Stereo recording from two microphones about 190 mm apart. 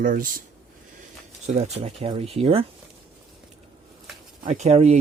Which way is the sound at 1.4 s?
35° right (ahead or behind).